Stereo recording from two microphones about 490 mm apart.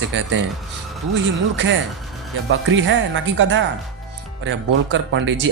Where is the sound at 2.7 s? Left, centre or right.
Right.